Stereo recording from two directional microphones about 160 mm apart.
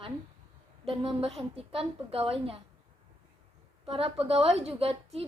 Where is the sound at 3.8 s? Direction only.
35° right (ahead or behind).